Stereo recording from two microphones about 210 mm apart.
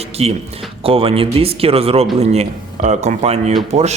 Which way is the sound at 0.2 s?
30° right (ahead or behind).